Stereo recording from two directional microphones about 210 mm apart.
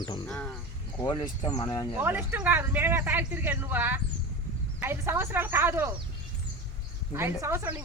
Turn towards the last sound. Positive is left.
turn(degrees=-10)  # may be behind; listen again after turning